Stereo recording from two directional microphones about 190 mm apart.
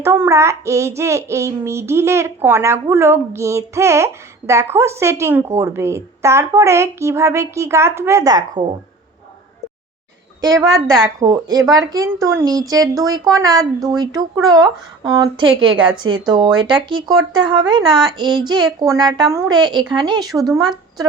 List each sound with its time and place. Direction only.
0.0 s child singing: 15° right (ahead or behind)
10.8 s a woman's voice: 20° right (ahead or behind)
11.7 s child singing: 20° right (ahead or behind)
12.4 s a woman's voice: 20° right (ahead or behind)